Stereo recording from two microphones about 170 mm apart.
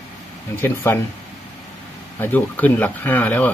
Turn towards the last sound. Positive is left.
turn(degrees=10)  # may be behind; listen again after turning